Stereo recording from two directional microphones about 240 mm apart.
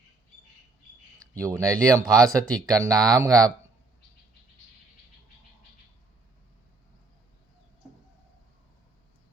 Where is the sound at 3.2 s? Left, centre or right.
Centre.